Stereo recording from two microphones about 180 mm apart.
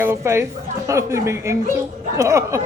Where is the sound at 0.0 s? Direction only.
15° right (ahead or behind).